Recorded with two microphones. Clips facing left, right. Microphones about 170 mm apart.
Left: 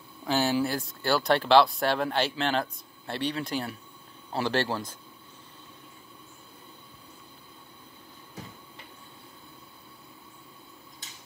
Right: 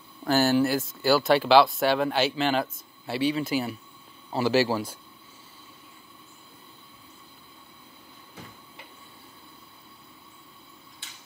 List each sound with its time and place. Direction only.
0.2 s speech: centre (ahead or behind)
11.0 s tick-tock: 40° left (ahead or behind)